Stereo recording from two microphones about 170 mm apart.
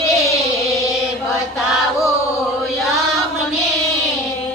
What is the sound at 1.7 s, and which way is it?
Chant, centre (ahead or behind).